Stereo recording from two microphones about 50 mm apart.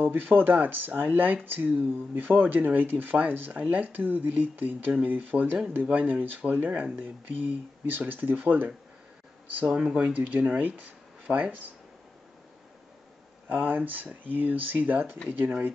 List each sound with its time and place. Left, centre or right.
0.0 s speech: right
7.9 s speech: right
9.7 s speech: right
13.5 s speech: right